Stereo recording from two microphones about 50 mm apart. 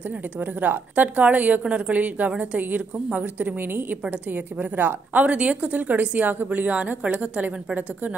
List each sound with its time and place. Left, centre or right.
0.4 s a woman's voice: right
5.2 s speech: right